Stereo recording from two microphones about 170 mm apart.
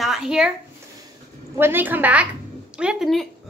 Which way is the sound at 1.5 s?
10° right (ahead or behind).